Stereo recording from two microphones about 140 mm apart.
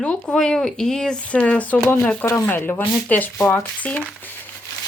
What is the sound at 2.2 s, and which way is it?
Speech, 20° left (ahead or behind).